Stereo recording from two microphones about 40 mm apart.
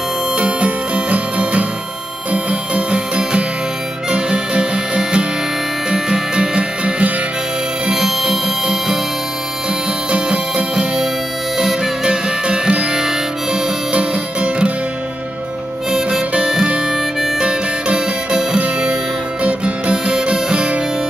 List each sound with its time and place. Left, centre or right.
0.4 s music: right
7.9 s music: centre
10.1 s music: right
11.5 s music: centre
12.1 s music: right
15.9 s harmonica: centre
16.3 s music: right
19.4 s guitar: right